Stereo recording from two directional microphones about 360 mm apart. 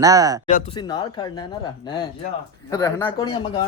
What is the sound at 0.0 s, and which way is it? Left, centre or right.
Speech, centre.